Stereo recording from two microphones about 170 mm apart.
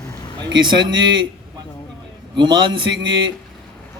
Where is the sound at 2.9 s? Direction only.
90° right.